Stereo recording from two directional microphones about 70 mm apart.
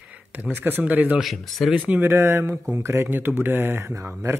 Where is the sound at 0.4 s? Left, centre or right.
Right.